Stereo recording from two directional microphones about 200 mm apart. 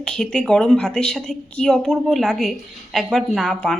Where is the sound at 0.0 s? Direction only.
5° left (ahead or behind).